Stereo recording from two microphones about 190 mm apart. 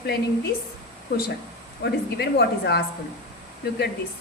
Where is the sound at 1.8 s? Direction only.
60° left (ahead or behind).